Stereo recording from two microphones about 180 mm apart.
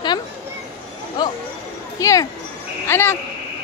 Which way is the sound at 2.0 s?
20° left (ahead or behind).